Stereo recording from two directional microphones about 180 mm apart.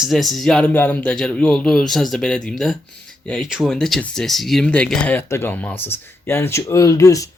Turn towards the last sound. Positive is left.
turn(degrees=20)  # may be behind; listen again after turning